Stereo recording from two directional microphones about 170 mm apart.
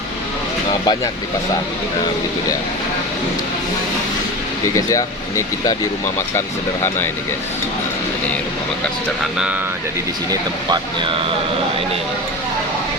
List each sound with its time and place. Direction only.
0.7 s speech: 25° left (ahead or behind)